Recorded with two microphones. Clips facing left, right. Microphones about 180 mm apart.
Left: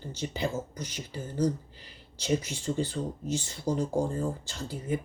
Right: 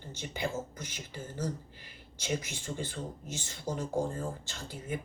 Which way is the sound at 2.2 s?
35° left (ahead or behind).